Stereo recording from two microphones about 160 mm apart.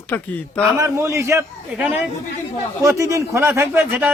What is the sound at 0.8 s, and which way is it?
Speech, 20° right (ahead or behind).